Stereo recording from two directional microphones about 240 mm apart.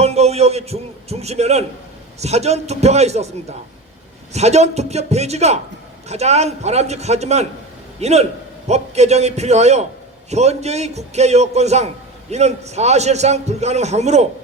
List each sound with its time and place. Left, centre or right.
0.0 s a man's voice: right